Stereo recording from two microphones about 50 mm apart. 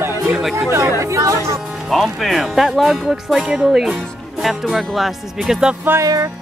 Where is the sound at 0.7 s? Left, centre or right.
Right.